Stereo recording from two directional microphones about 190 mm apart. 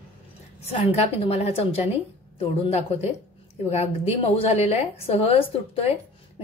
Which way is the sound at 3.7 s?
30° left (ahead or behind).